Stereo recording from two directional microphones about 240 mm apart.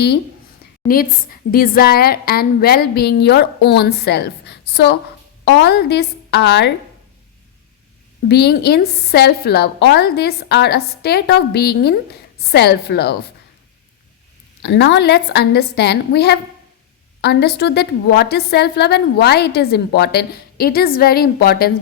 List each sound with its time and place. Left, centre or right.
0.9 s a woman's voice: left
8.3 s a woman's voice: left
14.6 s a woman's voice: left